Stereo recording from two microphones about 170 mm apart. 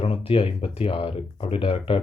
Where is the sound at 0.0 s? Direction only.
35° left (ahead or behind).